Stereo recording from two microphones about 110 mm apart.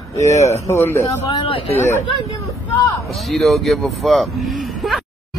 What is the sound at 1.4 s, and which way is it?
Speech, 60° left (ahead or behind).